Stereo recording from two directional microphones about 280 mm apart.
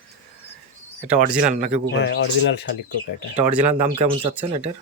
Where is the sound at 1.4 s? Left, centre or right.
Right.